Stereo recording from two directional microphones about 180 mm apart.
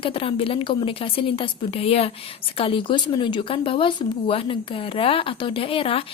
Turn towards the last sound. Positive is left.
turn(degrees=30)  # may be behind; listen again after turning